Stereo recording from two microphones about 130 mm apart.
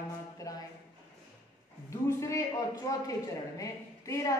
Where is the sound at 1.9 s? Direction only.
25° left (ahead or behind).